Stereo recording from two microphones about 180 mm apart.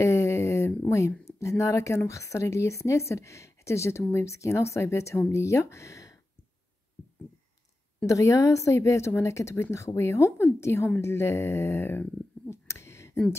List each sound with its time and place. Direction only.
0.0 s a sound: 15° left (ahead or behind)
1.6 s speech: 15° left (ahead or behind)
8.1 s speech: 15° left (ahead or behind)